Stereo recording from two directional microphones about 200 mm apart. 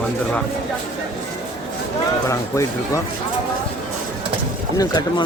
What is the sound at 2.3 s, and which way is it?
Speech, 15° left (ahead or behind).